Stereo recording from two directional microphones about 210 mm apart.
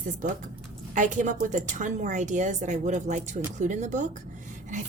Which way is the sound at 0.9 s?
35° right (ahead or behind).